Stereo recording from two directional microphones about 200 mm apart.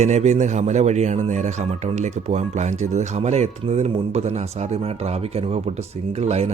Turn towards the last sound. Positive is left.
turn(degrees=-30)  # may be behind; listen again after turning